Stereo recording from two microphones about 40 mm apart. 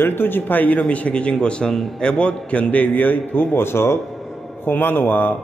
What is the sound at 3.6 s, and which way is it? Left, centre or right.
Speech, left.